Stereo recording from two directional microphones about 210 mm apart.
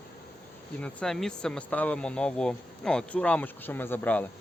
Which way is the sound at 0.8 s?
5° left (ahead or behind).